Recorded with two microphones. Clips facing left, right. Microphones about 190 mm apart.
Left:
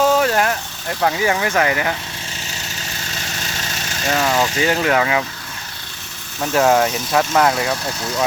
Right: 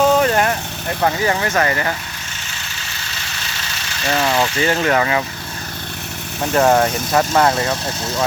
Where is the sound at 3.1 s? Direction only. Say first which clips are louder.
Left 3 dB; 45° left (ahead or behind).